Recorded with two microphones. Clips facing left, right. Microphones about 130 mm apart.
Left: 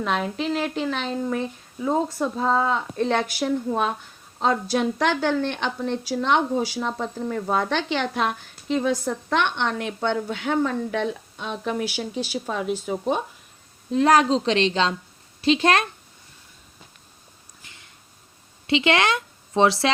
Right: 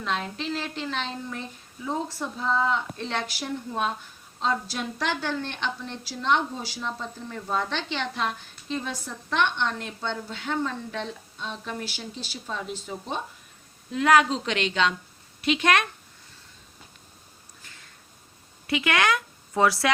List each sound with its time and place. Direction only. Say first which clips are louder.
0.0 s a woman's voice: left 5 dB; 60° left (ahead or behind)
13.9 s a woman's voice: left 3 dB; 35° left (ahead or behind)
18.7 s speech: left 3 dB; 25° left (ahead or behind)